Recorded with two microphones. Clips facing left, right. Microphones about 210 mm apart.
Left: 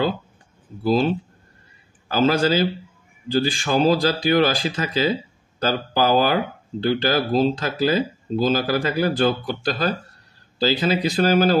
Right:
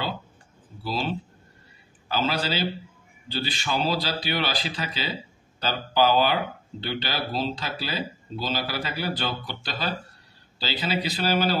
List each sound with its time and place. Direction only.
0.8 s speech: 50° left (ahead or behind)